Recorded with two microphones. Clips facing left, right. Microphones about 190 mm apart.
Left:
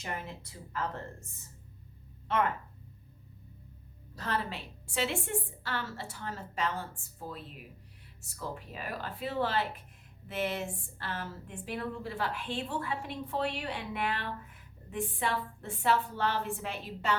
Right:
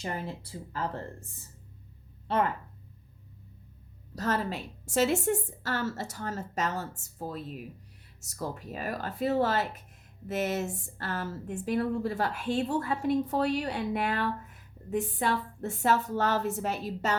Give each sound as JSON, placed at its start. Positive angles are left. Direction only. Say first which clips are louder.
{"t": 0.0, "sound": "a woman's voice", "louder": "right 4 dB", "side_deg": -35}
{"t": 4.1, "sound": "a woman's voice", "louder": "right 5 dB", "side_deg": -40}